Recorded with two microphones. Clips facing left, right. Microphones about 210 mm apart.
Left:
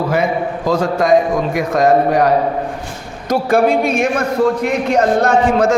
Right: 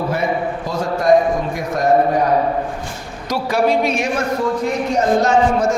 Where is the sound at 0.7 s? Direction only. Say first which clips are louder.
Left 2 dB; 90° left.